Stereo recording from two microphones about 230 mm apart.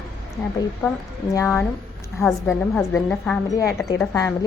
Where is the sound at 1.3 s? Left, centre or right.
Centre.